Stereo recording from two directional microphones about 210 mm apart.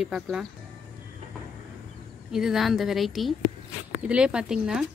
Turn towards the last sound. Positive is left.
turn(degrees=-5)  # may be behind; listen again after turning